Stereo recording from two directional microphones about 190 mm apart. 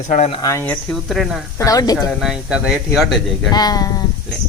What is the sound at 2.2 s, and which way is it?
Speech, 5° right (ahead or behind).